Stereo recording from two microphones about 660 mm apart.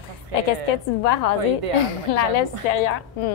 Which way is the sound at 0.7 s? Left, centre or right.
Left.